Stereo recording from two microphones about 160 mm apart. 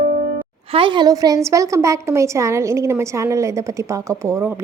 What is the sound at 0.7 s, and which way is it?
A woman's voice, 30° right (ahead or behind).